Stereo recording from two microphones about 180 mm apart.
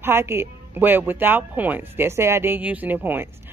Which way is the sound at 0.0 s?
15° right (ahead or behind).